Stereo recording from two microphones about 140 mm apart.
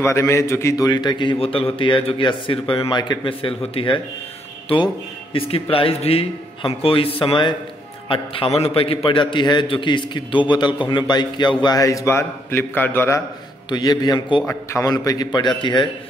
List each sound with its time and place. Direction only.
0.0 s a man's voice: 20° left (ahead or behind); by 4.0 s 40° left (ahead or behind)
5.3 s a man's voice: 40° left (ahead or behind); by 13.2 s 15° left (ahead or behind)
13.7 s a man's voice: 30° left (ahead or behind)
14.4 s a man's voice: 15° left (ahead or behind); by 15.9 s 35° left (ahead or behind)